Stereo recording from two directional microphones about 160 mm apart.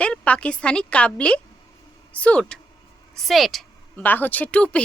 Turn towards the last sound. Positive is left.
turn(degrees=5)  # may be behind; listen again after turning